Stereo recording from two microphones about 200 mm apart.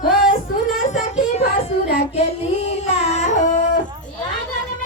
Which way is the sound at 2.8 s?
35° left (ahead or behind).